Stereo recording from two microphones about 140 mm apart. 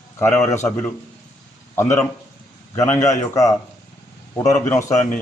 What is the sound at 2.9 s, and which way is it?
A man's voice, 25° left (ahead or behind).